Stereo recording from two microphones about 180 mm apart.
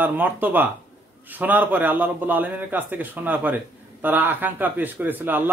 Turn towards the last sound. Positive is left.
turn(degrees=-10)  # may be behind; listen again after turning